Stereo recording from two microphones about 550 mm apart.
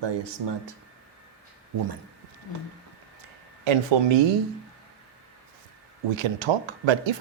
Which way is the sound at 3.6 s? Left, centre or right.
Right.